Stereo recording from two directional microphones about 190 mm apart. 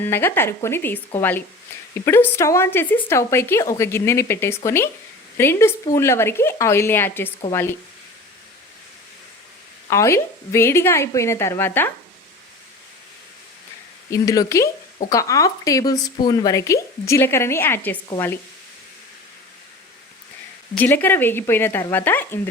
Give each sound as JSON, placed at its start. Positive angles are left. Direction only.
{"t": 0.0, "sound": "speech", "side_deg": 10}
{"t": 9.9, "sound": "speech", "side_deg": 15}
{"t": 14.1, "sound": "speech", "side_deg": 15}
{"t": 20.7, "sound": "speech", "side_deg": 10}